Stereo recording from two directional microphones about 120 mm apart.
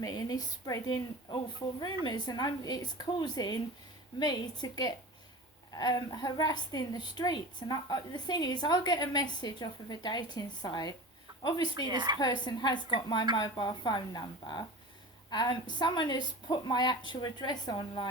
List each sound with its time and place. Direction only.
0.0 s a woman's voice: 30° left (ahead or behind)
11.9 s a woman's voice: 35° right (ahead or behind)
12.2 s a woman's voice: 35° left (ahead or behind)